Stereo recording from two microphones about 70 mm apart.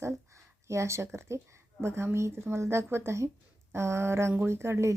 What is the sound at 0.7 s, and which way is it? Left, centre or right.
Speech, right.